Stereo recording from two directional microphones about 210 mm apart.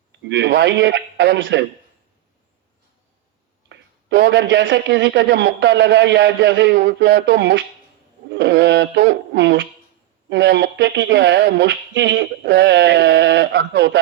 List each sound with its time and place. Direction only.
0.1 s a man's voice: 55° right (ahead or behind)
3.7 s a man's voice: 55° right (ahead or behind)